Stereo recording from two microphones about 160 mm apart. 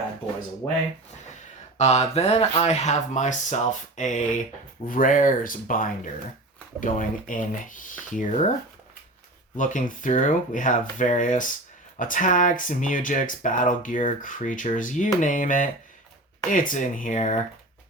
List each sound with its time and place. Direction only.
0.6 s speech: 25° left (ahead or behind)
1.8 s speech: 40° left (ahead or behind)
9.6 s speech: 50° left (ahead or behind)